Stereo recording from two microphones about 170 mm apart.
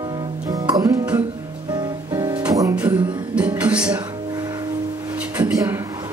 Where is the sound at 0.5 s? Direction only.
25° right (ahead or behind).